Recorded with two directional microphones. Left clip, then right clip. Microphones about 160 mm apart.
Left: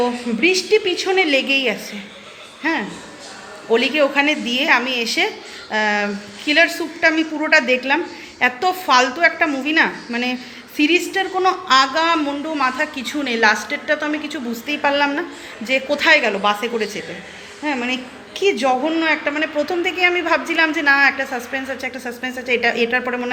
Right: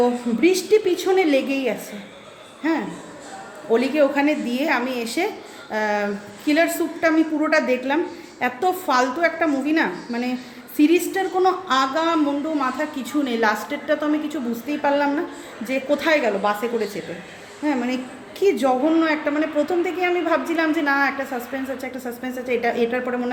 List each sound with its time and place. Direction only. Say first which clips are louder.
0.0 s a woman's voice: left 1 dB; 20° right (ahead or behind)
3.7 s a woman's voice: left 2 dB; 10° right (ahead or behind)
14.7 s a woman's voice: left 3 dB; 5° right (ahead or behind)
17.7 s a woman's voice: left 2 dB; 15° right (ahead or behind)